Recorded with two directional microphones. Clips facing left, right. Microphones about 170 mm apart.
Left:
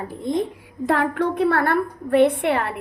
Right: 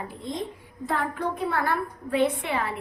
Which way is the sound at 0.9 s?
75° left (ahead or behind).